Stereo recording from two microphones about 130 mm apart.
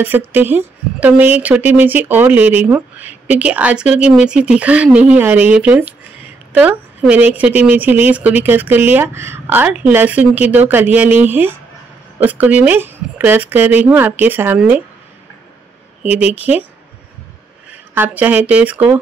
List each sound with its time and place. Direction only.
0.0 s speech: 15° right (ahead or behind)
16.0 s speech: 10° right (ahead or behind)
17.9 s speech: 15° right (ahead or behind)